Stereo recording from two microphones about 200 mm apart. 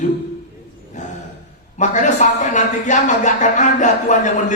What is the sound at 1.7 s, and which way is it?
A woman's voice, 40° left (ahead or behind).